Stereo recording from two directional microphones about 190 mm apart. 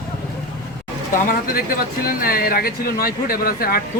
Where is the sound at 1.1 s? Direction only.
45° left (ahead or behind).